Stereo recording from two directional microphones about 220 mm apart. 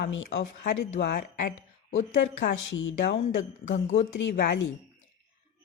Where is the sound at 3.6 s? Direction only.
30° left (ahead or behind).